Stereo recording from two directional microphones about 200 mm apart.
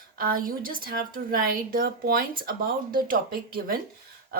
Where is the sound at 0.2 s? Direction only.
45° right (ahead or behind).